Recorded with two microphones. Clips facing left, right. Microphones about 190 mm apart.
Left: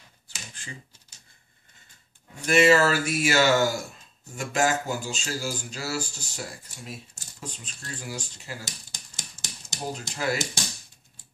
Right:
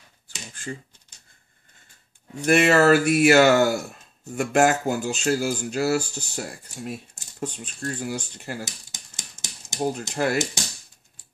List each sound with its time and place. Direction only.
2.4 s speech: 55° right (ahead or behind)
8.9 s a sound: 20° right (ahead or behind)
9.9 s speech: 55° right (ahead or behind)